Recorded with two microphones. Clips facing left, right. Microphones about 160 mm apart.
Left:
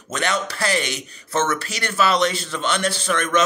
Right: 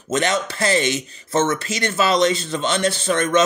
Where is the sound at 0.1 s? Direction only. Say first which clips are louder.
Right 3 dB; 20° right (ahead or behind).